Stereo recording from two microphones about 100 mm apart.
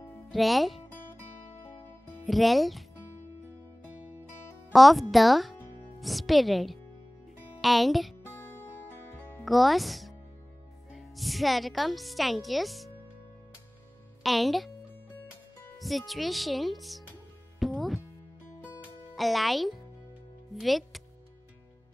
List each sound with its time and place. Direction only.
0.3 s speech: centre (ahead or behind)
2.2 s speech: centre (ahead or behind)
4.7 s speech: centre (ahead or behind)
8.4 s music: 25° left (ahead or behind)
9.4 s a woman's voice: centre (ahead or behind)
14.2 s speech: centre (ahead or behind)
15.8 s speech: centre (ahead or behind)
17.6 s music: centre (ahead or behind)
19.1 s a child's voice: centre (ahead or behind)